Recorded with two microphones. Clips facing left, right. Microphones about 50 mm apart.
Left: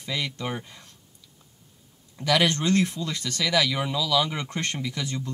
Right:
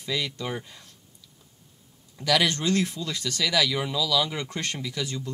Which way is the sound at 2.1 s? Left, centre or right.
Centre.